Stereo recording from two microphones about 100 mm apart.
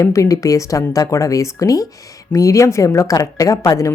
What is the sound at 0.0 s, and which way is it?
A woman's voice, 35° left (ahead or behind).